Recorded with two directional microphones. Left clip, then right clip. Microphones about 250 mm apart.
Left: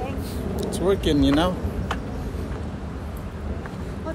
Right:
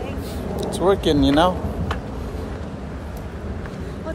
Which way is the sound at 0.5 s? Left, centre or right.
Centre.